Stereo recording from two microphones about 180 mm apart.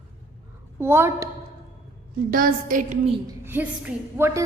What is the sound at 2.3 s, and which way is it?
Speech, 50° right (ahead or behind).